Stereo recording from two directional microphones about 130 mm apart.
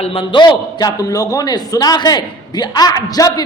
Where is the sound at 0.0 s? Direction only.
45° left (ahead or behind).